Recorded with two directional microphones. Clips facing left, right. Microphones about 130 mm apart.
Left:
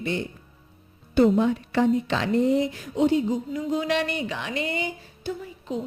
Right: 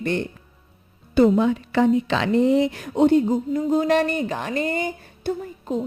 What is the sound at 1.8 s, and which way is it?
Speech, 90° right.